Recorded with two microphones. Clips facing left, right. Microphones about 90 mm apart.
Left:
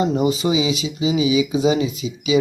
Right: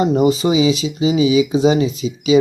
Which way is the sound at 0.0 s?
35° right (ahead or behind).